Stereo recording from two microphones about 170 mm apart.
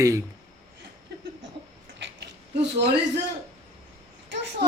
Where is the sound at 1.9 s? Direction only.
90° right.